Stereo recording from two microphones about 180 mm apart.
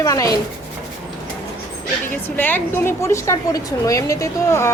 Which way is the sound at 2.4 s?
10° left (ahead or behind).